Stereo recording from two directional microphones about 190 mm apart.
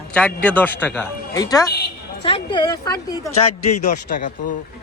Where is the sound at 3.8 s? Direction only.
40° left (ahead or behind).